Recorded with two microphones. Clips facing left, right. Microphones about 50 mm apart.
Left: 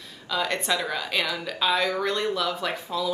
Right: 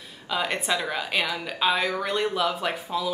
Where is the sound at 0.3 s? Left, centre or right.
Centre.